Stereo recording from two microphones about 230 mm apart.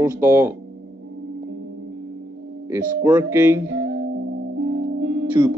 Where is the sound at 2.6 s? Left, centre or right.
Centre.